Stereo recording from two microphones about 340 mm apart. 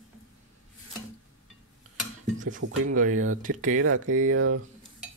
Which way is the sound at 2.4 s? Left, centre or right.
Right.